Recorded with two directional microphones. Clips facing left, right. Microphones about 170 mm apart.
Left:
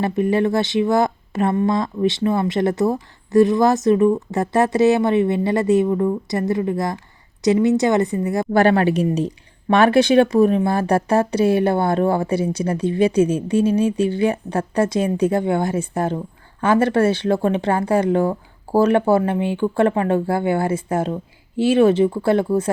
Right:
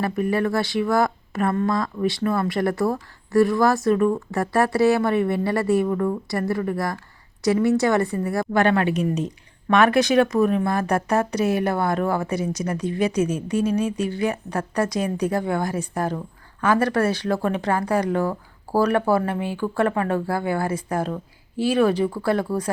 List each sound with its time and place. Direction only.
0.0 s speech: 25° left (ahead or behind)
8.5 s speech: 35° left (ahead or behind)